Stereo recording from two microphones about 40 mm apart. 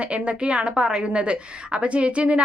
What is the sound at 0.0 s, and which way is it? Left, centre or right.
A woman's voice, right.